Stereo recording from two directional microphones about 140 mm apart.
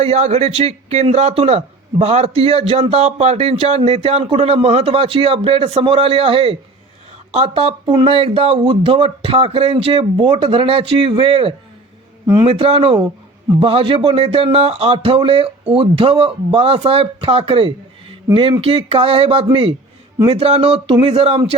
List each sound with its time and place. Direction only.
0.0 s speech: 50° right (ahead or behind)